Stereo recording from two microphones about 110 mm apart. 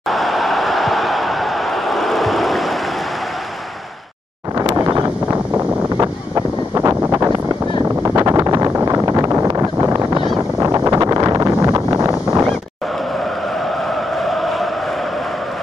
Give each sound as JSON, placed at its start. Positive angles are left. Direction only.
{"t": 0.1, "sound": "a sound", "side_deg": 0}
{"t": 4.6, "sound": "a sound", "side_deg": -25}
{"t": 5.9, "sound": "wind noise", "side_deg": -25}
{"t": 8.0, "sound": "vehicle", "side_deg": -30}
{"t": 10.6, "sound": "wind noise", "side_deg": -25}
{"t": 14.2, "sound": "chant", "side_deg": 0}